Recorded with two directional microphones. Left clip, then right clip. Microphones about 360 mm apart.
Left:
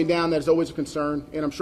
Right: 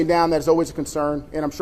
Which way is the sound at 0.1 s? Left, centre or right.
Centre.